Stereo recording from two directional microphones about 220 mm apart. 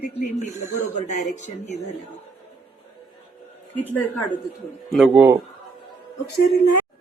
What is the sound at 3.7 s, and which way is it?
A woman's voice, 10° left (ahead or behind).